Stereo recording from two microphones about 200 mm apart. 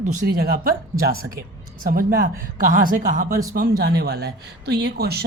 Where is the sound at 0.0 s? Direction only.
40° right (ahead or behind).